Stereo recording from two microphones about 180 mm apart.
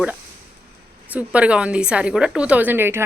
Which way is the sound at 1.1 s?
5° right (ahead or behind).